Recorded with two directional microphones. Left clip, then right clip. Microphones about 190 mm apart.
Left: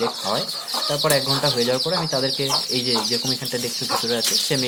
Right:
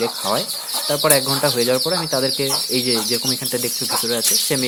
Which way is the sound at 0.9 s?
30° right (ahead or behind).